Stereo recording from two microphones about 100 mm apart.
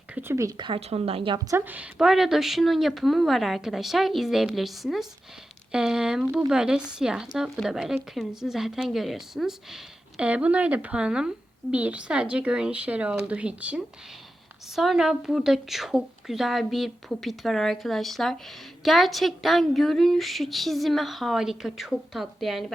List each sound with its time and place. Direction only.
0.2 s a woman's voice: 25° right (ahead or behind)
0.5 s speech: 50° right (ahead or behind)
0.8 s a woman's voice: 90° right; by 1.4 s 70° right (ahead or behind)
1.5 s a woman's voice: 20° right (ahead or behind)
2.0 s a woman's voice: 5° right (ahead or behind)
14.8 s a woman's voice: 5° right (ahead or behind)